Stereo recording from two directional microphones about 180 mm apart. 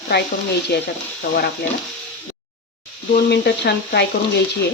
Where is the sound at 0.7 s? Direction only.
65° left (ahead or behind).